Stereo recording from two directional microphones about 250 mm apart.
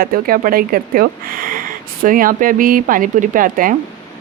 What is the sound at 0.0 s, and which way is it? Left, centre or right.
A woman's voice, right.